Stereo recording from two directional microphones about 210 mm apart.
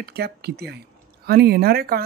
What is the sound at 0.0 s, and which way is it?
Speech, 50° right (ahead or behind).